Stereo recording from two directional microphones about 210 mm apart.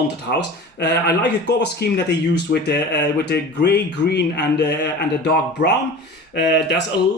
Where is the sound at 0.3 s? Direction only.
55° left (ahead or behind).